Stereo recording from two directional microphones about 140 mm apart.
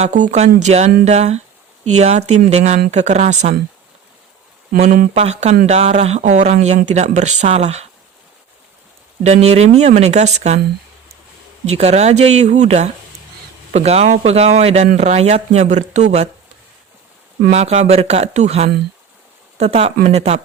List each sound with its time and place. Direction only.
0.0 s speech: 60° right (ahead or behind)
4.7 s speech: 85° right
5.1 s speech: 50° right (ahead or behind)
9.2 s speech: 50° right (ahead or behind)
11.6 s speech: 50° right (ahead or behind)
17.5 s speech: 50° right (ahead or behind)